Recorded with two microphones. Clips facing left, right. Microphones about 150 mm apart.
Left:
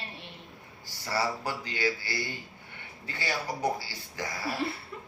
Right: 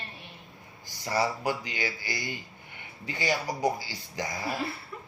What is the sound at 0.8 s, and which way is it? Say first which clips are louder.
Speech: right 2 dB; 15° right (ahead or behind).